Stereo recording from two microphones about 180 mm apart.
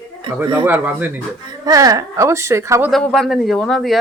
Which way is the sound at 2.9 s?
5° left (ahead or behind).